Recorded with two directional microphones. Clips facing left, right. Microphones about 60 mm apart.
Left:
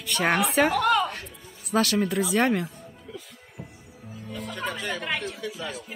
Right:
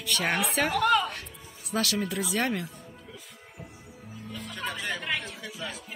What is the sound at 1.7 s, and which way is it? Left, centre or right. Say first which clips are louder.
Speech: left 6 dB; left.